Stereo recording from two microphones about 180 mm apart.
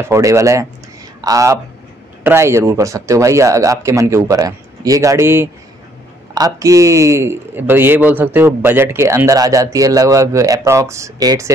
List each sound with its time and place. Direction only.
0.0 s a man's voice: 15° right (ahead or behind)